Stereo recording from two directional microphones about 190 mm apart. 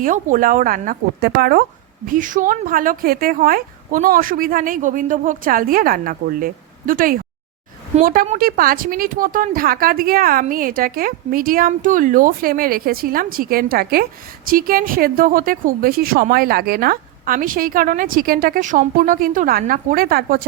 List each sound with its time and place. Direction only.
0.0 s speech: 45° right (ahead or behind)